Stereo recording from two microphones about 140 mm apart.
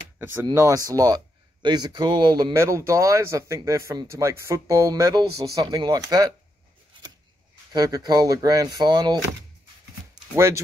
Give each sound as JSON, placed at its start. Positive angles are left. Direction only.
{"t": 0.2, "sound": "speech", "side_deg": -15}
{"t": 2.6, "sound": "speech", "side_deg": -20}
{"t": 7.7, "sound": "speech", "side_deg": -30}
{"t": 10.3, "sound": "speech", "side_deg": -20}